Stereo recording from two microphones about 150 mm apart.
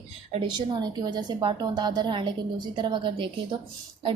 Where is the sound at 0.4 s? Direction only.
30° right (ahead or behind).